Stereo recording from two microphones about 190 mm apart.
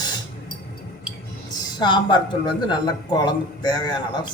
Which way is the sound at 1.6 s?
25° left (ahead or behind).